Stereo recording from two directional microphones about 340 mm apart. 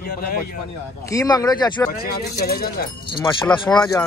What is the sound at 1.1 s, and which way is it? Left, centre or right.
Speech, centre.